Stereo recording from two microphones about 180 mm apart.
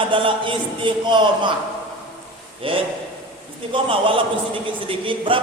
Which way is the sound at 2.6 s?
30° right (ahead or behind).